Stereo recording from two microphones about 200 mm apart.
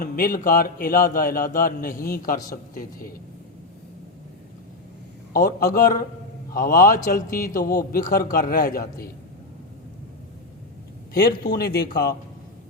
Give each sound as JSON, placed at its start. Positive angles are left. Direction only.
{"t": 0.0, "sound": "a man's voice", "side_deg": 45}
{"t": 5.3, "sound": "a man's voice", "side_deg": 45}
{"t": 11.1, "sound": "a man's voice", "side_deg": 50}